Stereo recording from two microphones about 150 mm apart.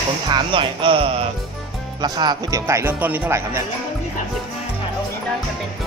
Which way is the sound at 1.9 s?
25° right (ahead or behind).